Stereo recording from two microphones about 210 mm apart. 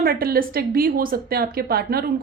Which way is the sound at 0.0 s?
45° right (ahead or behind).